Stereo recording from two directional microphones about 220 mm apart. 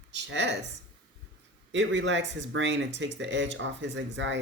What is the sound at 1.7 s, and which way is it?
Speech, 55° right (ahead or behind).